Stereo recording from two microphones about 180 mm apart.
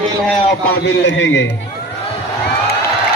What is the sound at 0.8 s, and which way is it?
Speech, 85° left.